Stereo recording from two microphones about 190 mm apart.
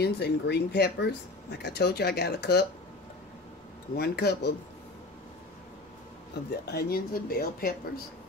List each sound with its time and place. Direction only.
0.0 s speech: 60° left (ahead or behind)
3.9 s speech: 55° left (ahead or behind)
6.6 s speech: 55° left (ahead or behind)